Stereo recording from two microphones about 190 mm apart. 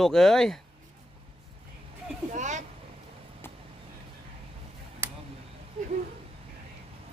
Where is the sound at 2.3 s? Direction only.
40° right (ahead or behind).